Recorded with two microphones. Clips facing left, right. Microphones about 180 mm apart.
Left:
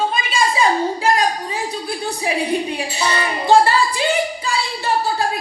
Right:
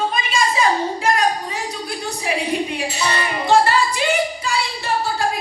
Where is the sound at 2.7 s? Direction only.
30° left (ahead or behind).